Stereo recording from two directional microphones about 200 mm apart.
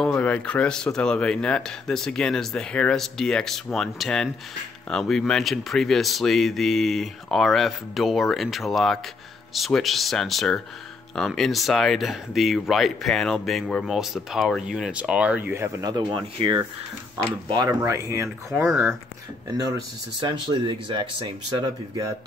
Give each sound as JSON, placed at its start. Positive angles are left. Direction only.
{"t": 0.0, "sound": "speech", "side_deg": 5}
{"t": 20.2, "sound": "speech", "side_deg": -25}